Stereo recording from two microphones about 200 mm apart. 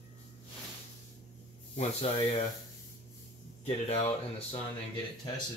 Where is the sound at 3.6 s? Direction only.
30° left (ahead or behind).